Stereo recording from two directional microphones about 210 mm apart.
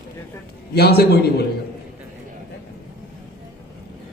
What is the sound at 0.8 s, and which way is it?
Speech, 50° left (ahead or behind).